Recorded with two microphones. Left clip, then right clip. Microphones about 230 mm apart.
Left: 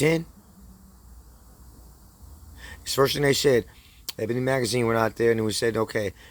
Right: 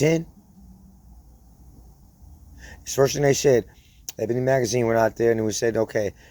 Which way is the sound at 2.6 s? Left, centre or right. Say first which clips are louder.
Right 2 dB; centre.